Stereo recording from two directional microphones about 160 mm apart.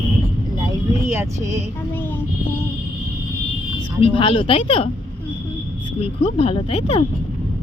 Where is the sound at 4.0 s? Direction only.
30° left (ahead or behind).